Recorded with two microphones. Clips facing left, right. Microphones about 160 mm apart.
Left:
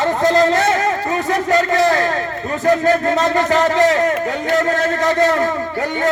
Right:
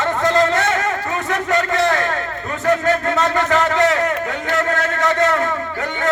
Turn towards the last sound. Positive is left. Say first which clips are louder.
# left 3 dB
turn(degrees=35)  # may be behind; listen again after turning